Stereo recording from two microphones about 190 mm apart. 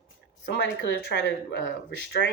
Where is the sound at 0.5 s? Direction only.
70° left (ahead or behind).